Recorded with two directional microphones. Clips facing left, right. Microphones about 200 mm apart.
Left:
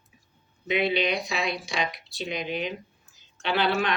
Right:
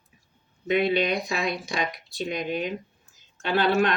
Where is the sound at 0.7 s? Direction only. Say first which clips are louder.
Right 2 dB; 50° right (ahead or behind).